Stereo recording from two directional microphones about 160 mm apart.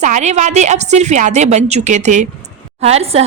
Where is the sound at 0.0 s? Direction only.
50° right (ahead or behind).